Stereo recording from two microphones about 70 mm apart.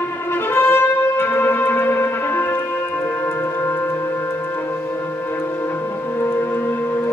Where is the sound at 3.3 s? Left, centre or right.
Left.